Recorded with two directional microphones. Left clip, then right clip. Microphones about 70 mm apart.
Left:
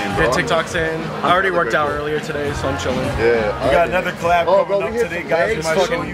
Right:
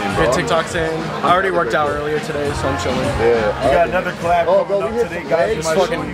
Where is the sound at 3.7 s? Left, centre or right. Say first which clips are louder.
Left 2 dB; left.